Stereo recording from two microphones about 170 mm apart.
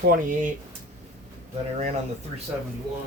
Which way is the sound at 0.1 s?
50° right (ahead or behind).